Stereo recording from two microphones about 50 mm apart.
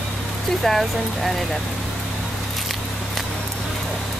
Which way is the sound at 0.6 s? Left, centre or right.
Centre.